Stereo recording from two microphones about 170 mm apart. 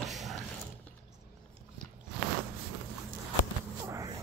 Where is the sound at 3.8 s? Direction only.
20° right (ahead or behind).